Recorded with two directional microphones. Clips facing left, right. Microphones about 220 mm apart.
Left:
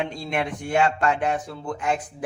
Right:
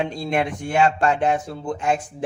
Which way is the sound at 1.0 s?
30° right (ahead or behind).